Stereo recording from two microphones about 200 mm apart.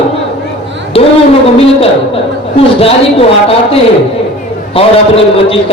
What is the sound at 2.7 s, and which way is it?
Speech, 30° left (ahead or behind).